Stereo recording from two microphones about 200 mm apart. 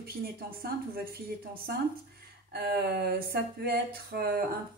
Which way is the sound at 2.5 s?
55° right (ahead or behind).